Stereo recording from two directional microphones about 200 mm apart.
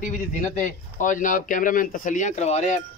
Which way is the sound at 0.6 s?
40° left (ahead or behind).